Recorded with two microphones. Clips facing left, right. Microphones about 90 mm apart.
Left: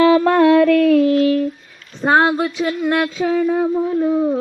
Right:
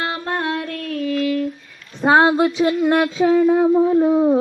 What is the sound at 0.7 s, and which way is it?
Child singing, 90° left.